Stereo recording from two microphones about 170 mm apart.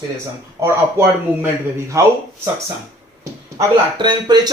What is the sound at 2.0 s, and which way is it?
Speech, 20° right (ahead or behind).